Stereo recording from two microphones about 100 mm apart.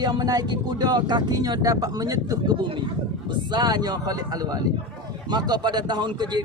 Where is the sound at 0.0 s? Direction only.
45° right (ahead or behind).